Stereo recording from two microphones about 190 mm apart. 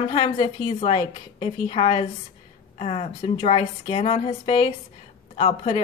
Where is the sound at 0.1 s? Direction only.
30° left (ahead or behind).